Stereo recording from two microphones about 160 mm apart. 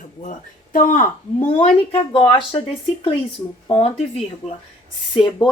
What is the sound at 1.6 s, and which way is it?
Speech, 40° left (ahead or behind).